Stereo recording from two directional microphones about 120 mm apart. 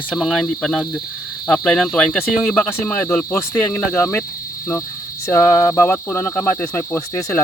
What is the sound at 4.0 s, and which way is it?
Speech, 20° left (ahead or behind).